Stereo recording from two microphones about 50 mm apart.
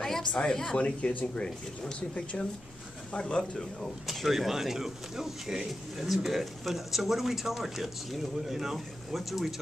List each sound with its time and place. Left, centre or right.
0.0 s a woman's voice: centre
4.1 s speech: centre